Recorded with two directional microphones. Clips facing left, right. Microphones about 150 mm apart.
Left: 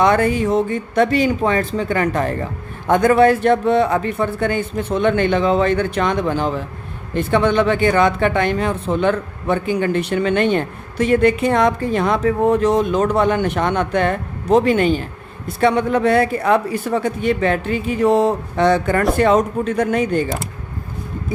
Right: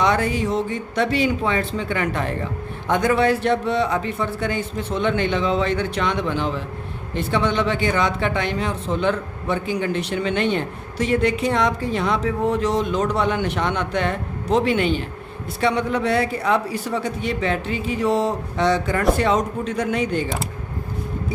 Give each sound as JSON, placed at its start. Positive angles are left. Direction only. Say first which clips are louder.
{"t": 0.0, "sound": "speech", "louder": "left 5 dB", "side_deg": 50}